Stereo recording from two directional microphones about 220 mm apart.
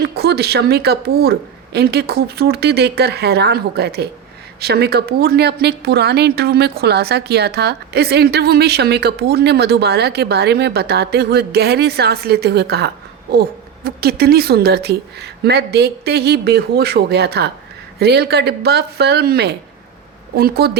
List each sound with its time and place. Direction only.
0.0 s a woman's voice: 45° right (ahead or behind)